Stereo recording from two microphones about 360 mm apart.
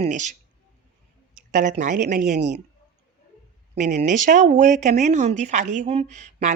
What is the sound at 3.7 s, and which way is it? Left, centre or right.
Speech, centre.